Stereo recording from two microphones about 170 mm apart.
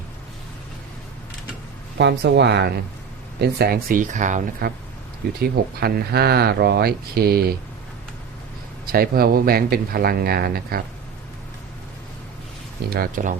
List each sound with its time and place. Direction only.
2.0 s speech: 85° right; by 4.7 s 45° right (ahead or behind)
5.4 s speech: 65° right (ahead or behind)
8.9 s speech: 60° right (ahead or behind)
12.9 s speech: 60° right (ahead or behind)